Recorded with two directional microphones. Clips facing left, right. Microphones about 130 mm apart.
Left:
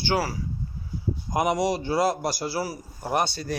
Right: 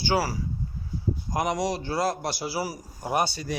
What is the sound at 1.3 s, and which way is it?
A man's voice, 5° left (ahead or behind).